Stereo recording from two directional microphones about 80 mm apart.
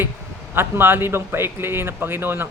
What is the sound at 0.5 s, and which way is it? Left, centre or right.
Speech, right.